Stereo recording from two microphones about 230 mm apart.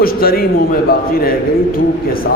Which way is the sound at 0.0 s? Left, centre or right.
Left.